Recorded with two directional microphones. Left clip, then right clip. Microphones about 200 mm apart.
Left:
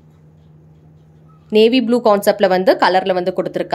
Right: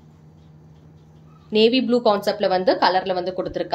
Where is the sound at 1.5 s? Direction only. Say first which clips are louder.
Left 5 dB; 35° left (ahead or behind).